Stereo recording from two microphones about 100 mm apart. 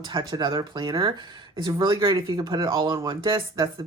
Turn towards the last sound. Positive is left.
turn(degrees=-45)  # may be behind; listen again after turning